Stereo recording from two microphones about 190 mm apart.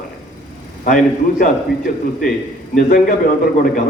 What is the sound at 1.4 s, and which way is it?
A man's voice, 45° left (ahead or behind).